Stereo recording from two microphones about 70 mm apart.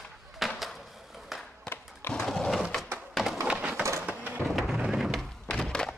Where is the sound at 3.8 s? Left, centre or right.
Right.